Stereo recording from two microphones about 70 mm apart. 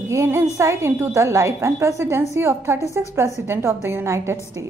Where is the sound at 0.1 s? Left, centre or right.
Right.